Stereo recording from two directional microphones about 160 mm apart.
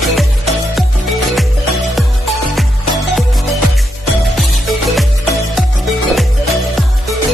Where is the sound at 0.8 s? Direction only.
Centre (ahead or behind).